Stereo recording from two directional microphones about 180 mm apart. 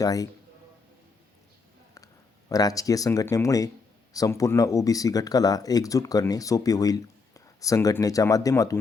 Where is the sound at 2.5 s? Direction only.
20° left (ahead or behind).